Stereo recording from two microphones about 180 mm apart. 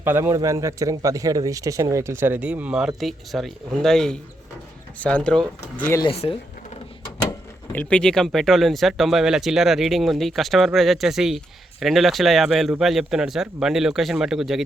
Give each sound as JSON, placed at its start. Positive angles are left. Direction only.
{"t": 0.0, "sound": "speech", "side_deg": -15}
{"t": 6.0, "sound": "speech", "side_deg": 30}
{"t": 7.3, "sound": "speech", "side_deg": 10}